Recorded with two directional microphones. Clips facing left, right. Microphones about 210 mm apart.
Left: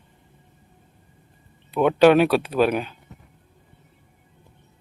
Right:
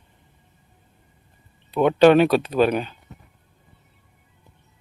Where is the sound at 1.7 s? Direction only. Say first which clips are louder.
Right 1 dB; 5° left (ahead or behind).